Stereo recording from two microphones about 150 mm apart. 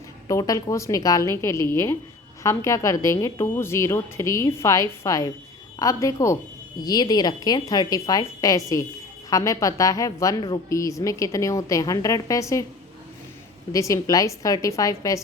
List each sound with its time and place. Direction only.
0.3 s a woman's voice: 20° left (ahead or behind)
13.7 s a woman's voice: 20° left (ahead or behind)